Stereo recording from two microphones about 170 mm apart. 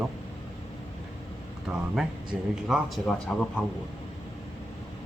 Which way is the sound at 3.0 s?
5° left (ahead or behind).